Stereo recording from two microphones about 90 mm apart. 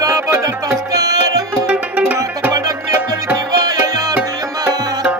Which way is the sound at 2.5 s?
45° right (ahead or behind).